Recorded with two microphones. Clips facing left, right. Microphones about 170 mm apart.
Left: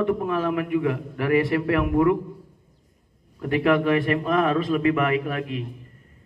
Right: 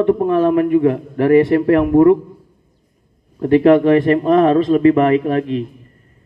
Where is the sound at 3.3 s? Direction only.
35° right (ahead or behind).